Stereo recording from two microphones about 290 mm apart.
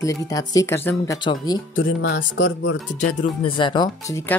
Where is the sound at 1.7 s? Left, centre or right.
Left.